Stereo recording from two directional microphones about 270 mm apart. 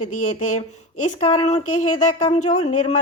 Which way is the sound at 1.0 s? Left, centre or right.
Left.